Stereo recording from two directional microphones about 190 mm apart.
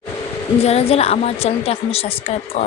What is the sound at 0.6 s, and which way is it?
A woman's voice, 35° left (ahead or behind).